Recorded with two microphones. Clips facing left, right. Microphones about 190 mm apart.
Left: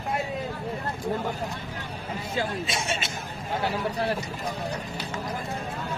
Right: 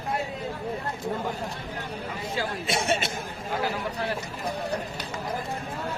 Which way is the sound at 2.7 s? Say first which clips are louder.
Right 4 dB; 60° right (ahead or behind).